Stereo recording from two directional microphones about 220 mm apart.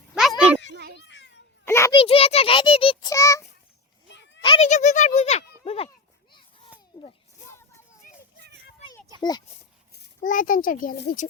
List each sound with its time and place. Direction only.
0.1 s a sound: centre (ahead or behind)
0.9 s children playing: 55° left (ahead or behind)
1.6 s a sound: 10° left (ahead or behind)
2.0 s speech: 25° left (ahead or behind)
4.4 s speech: 25° left (ahead or behind)
9.9 s a child's voice: 35° left (ahead or behind)